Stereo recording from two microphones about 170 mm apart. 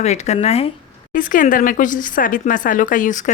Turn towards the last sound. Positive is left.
turn(degrees=45)  # may be behind; listen again after turning